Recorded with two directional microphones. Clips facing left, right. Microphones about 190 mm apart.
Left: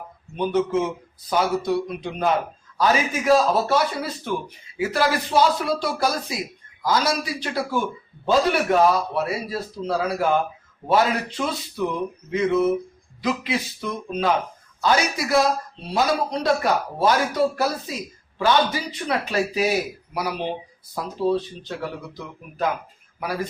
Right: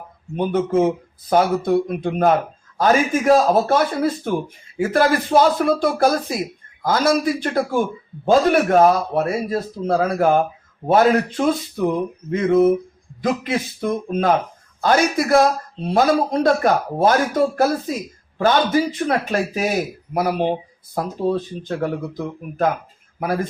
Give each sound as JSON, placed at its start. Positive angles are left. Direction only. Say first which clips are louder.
{"t": 0.3, "sound": "speech", "louder": "right 3 dB", "side_deg": -50}
{"t": 17.9, "sound": "speech", "louder": "right 5 dB", "side_deg": -50}